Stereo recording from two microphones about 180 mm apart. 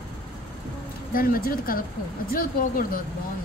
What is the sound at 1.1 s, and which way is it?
Speech, 55° left (ahead or behind).